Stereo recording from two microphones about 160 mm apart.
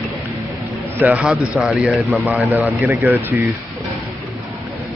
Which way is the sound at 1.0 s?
10° right (ahead or behind).